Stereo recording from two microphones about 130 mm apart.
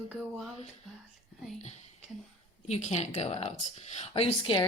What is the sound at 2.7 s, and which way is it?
Speech, 60° left (ahead or behind).